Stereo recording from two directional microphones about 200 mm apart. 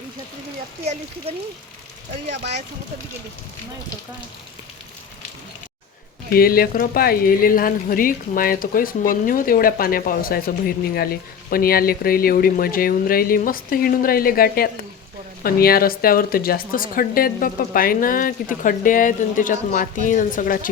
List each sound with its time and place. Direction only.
1.3 s speech: 30° right (ahead or behind)
6.3 s a woman's voice: 50° left (ahead or behind)